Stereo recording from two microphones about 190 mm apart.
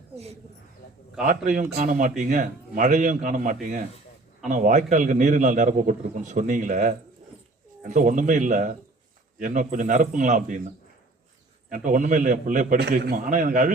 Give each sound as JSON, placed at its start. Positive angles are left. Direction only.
{"t": 1.5, "sound": "a man's voice", "side_deg": -40}
{"t": 11.7, "sound": "a man's voice", "side_deg": -45}